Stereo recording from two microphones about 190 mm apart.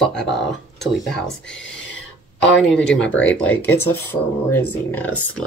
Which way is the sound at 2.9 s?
5° left (ahead or behind).